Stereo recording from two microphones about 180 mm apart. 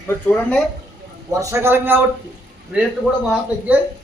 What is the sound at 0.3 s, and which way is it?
Speech, 10° left (ahead or behind).